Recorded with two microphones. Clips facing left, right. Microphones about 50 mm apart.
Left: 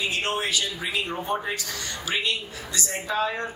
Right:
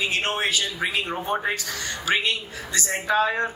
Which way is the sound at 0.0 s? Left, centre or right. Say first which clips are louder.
Right 2 dB; right.